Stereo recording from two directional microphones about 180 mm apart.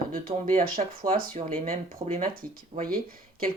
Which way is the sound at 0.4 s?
45° right (ahead or behind).